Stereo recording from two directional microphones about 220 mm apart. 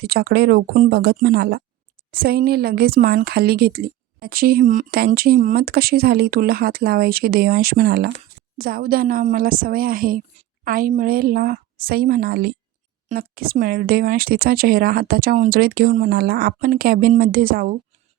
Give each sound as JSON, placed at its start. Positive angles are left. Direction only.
{"t": 0.0, "sound": "speech", "side_deg": -45}